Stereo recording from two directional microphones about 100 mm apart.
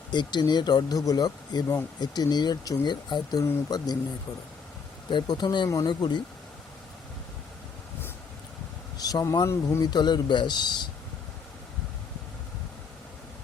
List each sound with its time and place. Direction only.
0.1 s speech: 45° left (ahead or behind)
5.1 s speech: 45° left (ahead or behind)
5.6 s speech: 35° left (ahead or behind)
5.9 s speech: 50° left (ahead or behind)
9.0 s vehicle: 40° left (ahead or behind)
9.2 s speech: 35° left (ahead or behind)
9.8 s speech: 45° left (ahead or behind)